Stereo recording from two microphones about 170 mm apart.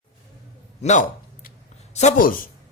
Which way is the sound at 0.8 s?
50° left (ahead or behind).